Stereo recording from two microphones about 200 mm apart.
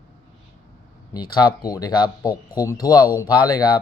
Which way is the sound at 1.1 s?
20° left (ahead or behind).